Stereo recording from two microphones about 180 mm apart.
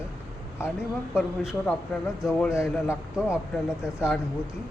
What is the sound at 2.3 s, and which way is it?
Speech, 5° left (ahead or behind).